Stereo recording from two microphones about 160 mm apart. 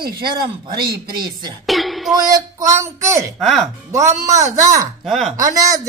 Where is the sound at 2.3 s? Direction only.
20° right (ahead or behind).